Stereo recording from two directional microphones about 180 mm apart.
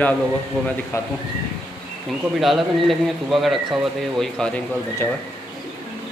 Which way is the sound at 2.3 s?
Centre (ahead or behind).